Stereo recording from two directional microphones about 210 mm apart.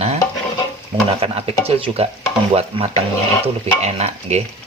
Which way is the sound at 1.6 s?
30° right (ahead or behind).